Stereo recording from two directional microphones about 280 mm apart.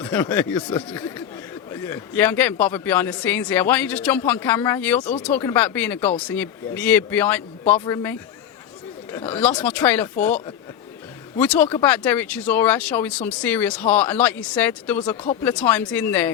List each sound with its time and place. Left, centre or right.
0.0 s a man's voice: centre
15.1 s speech: left
15.4 s a man's voice: centre